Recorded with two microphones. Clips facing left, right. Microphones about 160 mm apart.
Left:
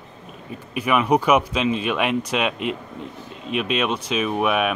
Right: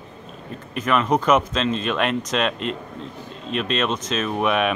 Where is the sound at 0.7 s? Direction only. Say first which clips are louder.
Left 1 dB; 10° left (ahead or behind).